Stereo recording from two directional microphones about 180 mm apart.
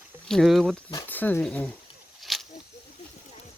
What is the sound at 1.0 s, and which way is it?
Speech, 10° left (ahead or behind).